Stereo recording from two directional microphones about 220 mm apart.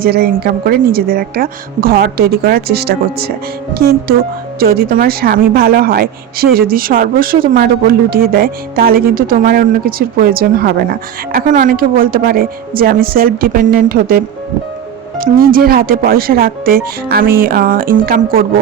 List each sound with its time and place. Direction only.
0.0 s a woman's voice: 45° right (ahead or behind)
15.2 s speech: 40° right (ahead or behind)